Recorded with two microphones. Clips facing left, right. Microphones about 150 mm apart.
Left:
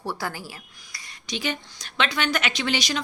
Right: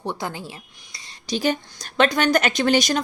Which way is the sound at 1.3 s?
40° right (ahead or behind).